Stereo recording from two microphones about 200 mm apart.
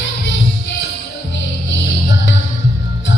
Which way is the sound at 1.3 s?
60° left (ahead or behind).